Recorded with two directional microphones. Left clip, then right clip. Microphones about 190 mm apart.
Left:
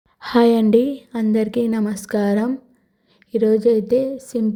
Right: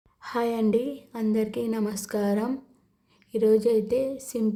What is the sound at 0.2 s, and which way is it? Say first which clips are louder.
A woman's voice: left 11 dB; 30° left (ahead or behind).